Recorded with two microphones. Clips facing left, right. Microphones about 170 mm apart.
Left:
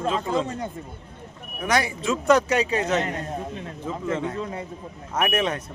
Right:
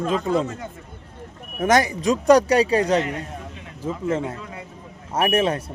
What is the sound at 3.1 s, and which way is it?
Speech, 35° left (ahead or behind).